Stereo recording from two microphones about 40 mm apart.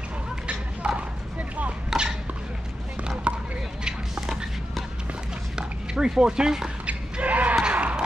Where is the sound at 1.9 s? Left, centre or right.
Centre.